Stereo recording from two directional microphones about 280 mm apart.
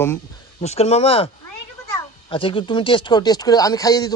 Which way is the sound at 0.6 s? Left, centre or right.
Left.